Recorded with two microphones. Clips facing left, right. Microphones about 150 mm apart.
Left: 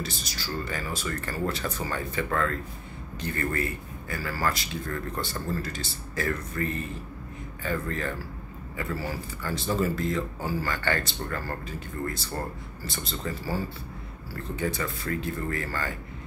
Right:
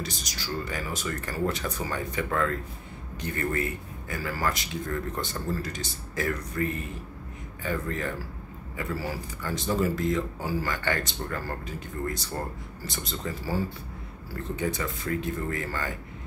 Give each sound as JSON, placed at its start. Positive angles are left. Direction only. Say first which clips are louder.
{"t": 0.0, "sound": "speech", "louder": "left 1 dB", "side_deg": -15}